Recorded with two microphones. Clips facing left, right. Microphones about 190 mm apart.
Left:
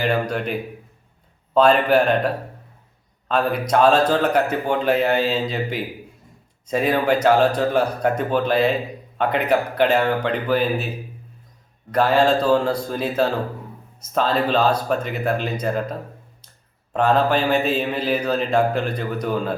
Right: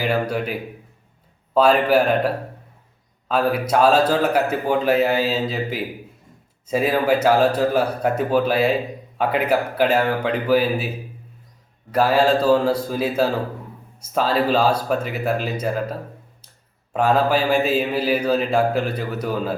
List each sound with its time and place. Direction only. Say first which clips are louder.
0.0 s a man's voice: even; 5° right (ahead or behind)
11.9 s speech: even; 5° right (ahead or behind)